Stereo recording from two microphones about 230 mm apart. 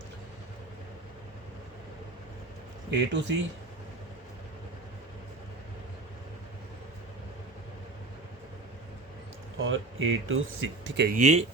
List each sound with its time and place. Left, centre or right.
2.9 s speech: right
9.6 s speech: right
11.2 s speech: right